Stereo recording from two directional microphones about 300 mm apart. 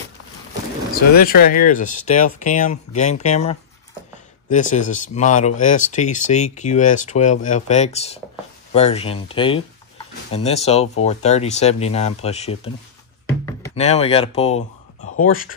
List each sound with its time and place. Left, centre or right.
1.1 s speech: left
13.7 s speech: left